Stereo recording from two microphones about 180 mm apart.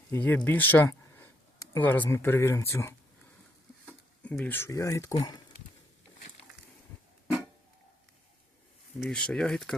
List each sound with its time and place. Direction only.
0.1 s speech: 10° left (ahead or behind)
9.0 s speech: 5° left (ahead or behind)